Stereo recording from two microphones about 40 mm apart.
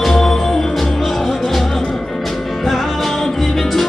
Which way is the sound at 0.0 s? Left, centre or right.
Centre.